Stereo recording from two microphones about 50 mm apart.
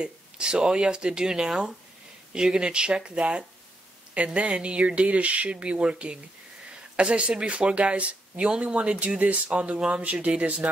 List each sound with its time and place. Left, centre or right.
0.0 s speech: centre
10.2 s speech: right